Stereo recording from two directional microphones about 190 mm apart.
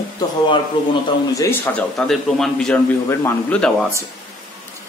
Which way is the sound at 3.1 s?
15° left (ahead or behind).